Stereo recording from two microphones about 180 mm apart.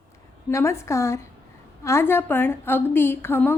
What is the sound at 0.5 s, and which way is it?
A woman's voice, 15° left (ahead or behind).